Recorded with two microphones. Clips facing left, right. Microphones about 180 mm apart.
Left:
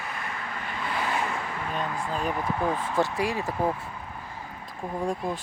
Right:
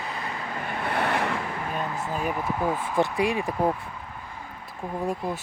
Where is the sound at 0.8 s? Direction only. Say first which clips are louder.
Right 3 dB; 65° right (ahead or behind).